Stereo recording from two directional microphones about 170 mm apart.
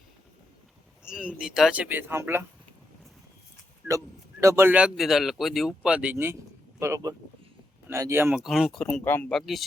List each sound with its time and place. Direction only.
1.0 s a man's voice: 5° right (ahead or behind)
3.8 s a man's voice: 20° right (ahead or behind)
8.3 s speech: centre (ahead or behind)